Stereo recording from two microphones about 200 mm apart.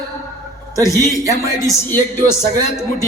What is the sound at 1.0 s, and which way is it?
Speech, 15° right (ahead or behind).